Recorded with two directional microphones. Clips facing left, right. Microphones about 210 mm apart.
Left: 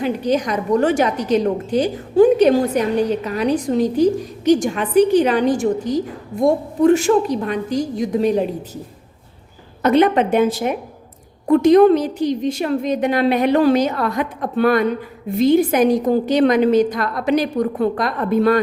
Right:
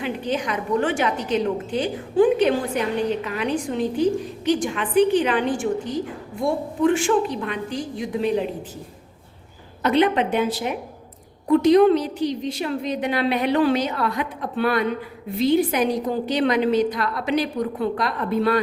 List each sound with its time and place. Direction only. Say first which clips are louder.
0.0 s a woman's voice: left 6 dB; 40° left (ahead or behind)
9.8 s a woman's voice: left 5 dB; 45° left (ahead or behind)